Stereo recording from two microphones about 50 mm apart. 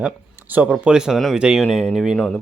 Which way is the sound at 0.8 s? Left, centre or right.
Centre.